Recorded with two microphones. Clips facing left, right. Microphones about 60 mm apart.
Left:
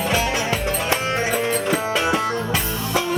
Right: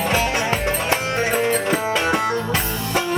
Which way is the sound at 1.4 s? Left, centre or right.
Right.